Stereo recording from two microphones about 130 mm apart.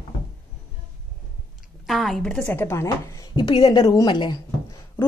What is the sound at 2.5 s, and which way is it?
Speech, 20° left (ahead or behind).